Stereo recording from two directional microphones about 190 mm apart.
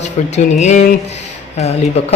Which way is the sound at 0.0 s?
35° left (ahead or behind).